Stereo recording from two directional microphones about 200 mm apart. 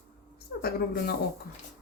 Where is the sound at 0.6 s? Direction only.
50° left (ahead or behind).